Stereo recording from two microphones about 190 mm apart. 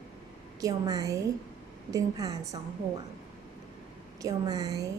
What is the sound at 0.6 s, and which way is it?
A woman's voice, 20° right (ahead or behind).